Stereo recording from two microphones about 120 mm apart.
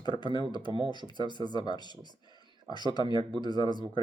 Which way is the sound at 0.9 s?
40° left (ahead or behind).